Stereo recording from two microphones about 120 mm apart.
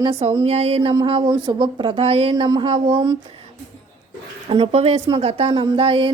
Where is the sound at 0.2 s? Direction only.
60° right (ahead or behind).